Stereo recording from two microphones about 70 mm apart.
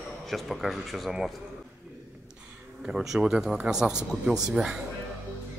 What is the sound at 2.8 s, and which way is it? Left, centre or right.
Speech, centre.